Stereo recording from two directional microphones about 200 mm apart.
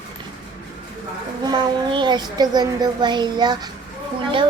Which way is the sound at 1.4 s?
20° right (ahead or behind).